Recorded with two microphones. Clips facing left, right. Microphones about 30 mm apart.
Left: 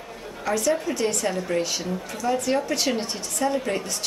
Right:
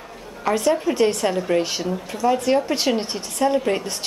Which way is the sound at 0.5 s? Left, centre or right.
Right.